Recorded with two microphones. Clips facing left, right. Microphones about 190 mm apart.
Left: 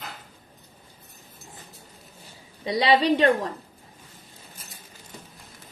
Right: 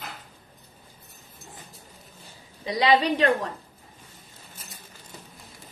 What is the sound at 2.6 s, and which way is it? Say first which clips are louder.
Speech: left 1 dB; 30° left (ahead or behind).